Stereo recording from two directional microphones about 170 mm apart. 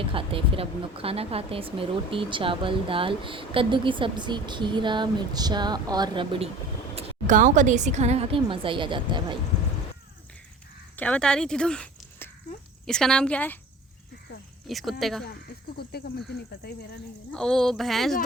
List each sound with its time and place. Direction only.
0.1 s speech: 30° right (ahead or behind)
6.9 s speech: 45° right (ahead or behind); by 9.2 s 30° right (ahead or behind)
10.9 s speech: 10° left (ahead or behind)
14.7 s speech: centre (ahead or behind)
15.8 s speech: 65° left (ahead or behind)
17.3 s speech: 5° left (ahead or behind)